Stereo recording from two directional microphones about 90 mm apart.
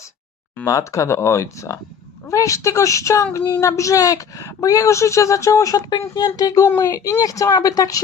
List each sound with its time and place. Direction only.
0.6 s speech: 35° left (ahead or behind)
5.9 s speech: 50° left (ahead or behind)